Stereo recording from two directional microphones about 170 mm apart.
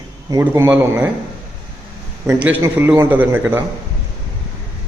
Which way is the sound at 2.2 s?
15° right (ahead or behind).